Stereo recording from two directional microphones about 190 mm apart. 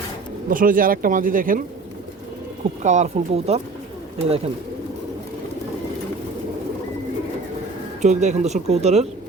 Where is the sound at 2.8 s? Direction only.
40° right (ahead or behind).